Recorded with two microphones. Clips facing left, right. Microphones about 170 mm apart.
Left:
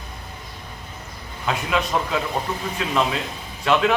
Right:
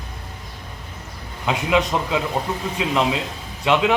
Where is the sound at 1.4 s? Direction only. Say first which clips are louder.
Right 4 dB; 15° right (ahead or behind).